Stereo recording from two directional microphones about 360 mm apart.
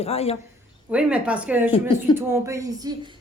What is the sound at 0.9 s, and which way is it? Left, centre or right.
A woman's voice, centre.